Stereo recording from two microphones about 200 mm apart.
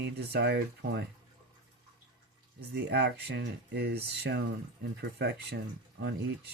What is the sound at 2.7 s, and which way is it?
Speech, 55° right (ahead or behind).